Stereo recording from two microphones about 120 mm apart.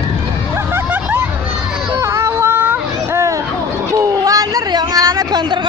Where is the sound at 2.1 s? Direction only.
20° right (ahead or behind).